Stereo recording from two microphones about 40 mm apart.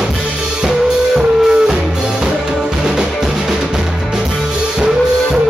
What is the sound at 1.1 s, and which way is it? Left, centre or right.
Music, centre.